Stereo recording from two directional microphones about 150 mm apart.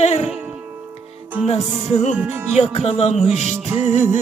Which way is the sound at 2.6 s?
40° left (ahead or behind).